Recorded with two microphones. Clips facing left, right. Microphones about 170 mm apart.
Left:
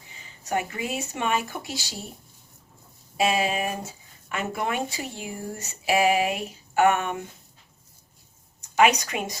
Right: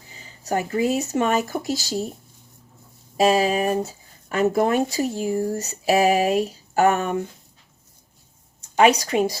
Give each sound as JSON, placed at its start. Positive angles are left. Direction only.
{"t": 0.1, "sound": "speech", "side_deg": -35}
{"t": 3.2, "sound": "speech", "side_deg": -40}
{"t": 8.7, "sound": "speech", "side_deg": -35}